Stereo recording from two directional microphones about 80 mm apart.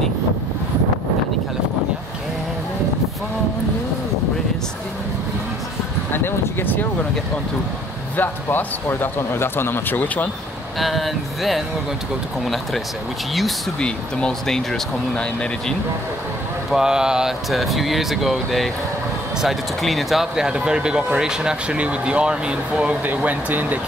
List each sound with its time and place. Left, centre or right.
6.1 s a sound: left
8.2 s speech: left
10.8 s speech: centre
13.7 s speech: centre
16.7 s speech: centre